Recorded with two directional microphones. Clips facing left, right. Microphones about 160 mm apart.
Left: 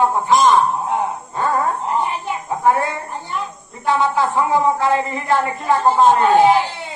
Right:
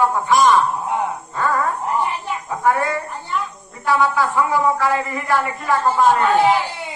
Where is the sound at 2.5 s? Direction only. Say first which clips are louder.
Left 2 dB; 25° left (ahead or behind).